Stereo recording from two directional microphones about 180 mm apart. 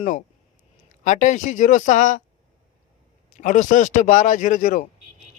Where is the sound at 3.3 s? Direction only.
45° left (ahead or behind).